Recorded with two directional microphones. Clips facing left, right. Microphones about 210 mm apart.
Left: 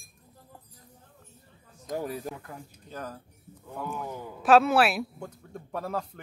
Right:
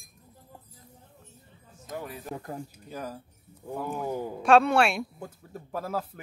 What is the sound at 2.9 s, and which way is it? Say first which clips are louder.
Speech: even; 10° right (ahead or behind).